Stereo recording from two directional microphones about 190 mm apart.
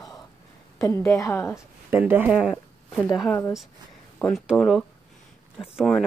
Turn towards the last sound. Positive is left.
turn(degrees=0)  # may be behind; listen again after turning